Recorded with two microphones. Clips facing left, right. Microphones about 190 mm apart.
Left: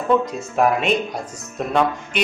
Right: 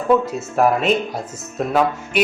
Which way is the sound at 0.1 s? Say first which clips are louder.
Right 2 dB; 5° right (ahead or behind).